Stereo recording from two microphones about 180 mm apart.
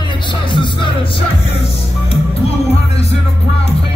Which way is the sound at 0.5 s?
25° left (ahead or behind).